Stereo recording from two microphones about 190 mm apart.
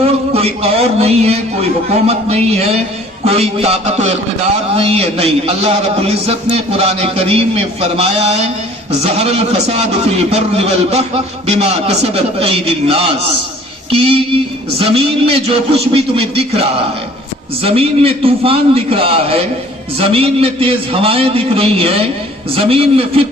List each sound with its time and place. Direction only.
0.0 s a man's voice: 30° right (ahead or behind)